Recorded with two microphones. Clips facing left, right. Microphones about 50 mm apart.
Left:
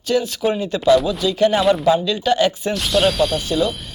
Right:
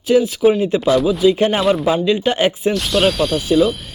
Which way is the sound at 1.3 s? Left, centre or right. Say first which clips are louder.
Right 1 dB; right.